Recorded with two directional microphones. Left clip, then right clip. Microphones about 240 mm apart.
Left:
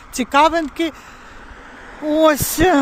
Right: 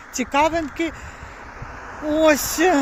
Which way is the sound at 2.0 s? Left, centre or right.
Left.